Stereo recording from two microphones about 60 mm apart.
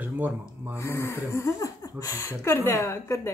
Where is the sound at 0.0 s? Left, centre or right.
Right.